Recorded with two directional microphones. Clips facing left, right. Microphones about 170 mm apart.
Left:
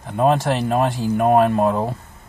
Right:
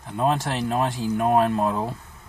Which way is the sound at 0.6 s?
65° left (ahead or behind).